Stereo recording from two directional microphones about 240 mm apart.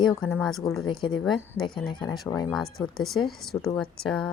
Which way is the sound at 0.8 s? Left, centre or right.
Centre.